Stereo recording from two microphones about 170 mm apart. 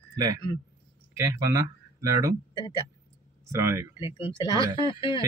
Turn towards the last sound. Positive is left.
turn(degrees=30)  # may be behind; listen again after turning